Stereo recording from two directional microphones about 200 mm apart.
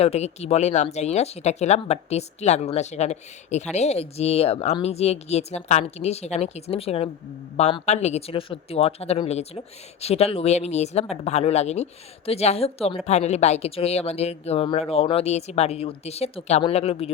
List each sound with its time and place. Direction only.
0.0 s speech: 30° left (ahead or behind)